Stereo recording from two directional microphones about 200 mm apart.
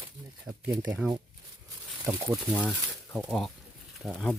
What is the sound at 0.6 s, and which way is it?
Speech, 10° right (ahead or behind).